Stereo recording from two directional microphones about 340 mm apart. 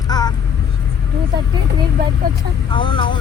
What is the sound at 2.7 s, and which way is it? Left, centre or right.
Speech, centre.